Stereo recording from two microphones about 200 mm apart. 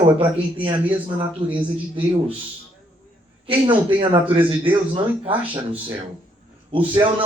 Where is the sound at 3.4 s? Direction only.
25° right (ahead or behind).